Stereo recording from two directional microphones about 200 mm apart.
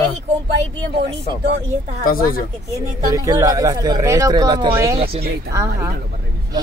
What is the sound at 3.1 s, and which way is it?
Speech, 15° right (ahead or behind).